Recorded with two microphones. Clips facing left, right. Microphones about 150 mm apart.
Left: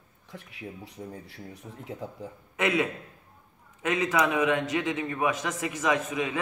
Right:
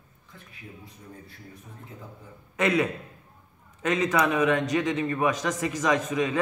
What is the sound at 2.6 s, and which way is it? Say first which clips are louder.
A man's voice: right 2 dB; 15° left (ahead or behind).